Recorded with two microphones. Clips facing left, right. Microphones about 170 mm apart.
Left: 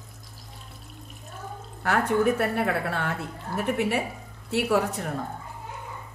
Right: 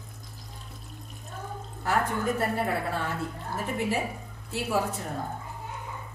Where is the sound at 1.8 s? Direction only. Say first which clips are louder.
Left 5 dB; 70° left (ahead or behind).